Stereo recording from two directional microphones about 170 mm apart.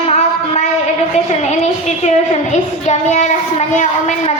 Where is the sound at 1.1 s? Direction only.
40° left (ahead or behind).